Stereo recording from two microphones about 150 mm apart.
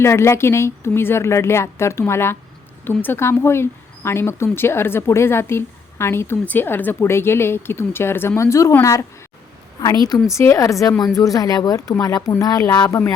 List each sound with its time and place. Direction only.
0.0 s speech: 15° left (ahead or behind)